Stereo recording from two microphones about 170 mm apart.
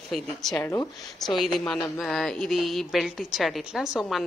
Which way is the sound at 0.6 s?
20° left (ahead or behind).